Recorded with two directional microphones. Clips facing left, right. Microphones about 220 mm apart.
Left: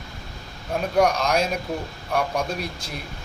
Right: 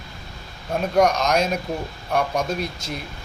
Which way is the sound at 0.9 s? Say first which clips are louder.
Right 2 dB; 5° left (ahead or behind).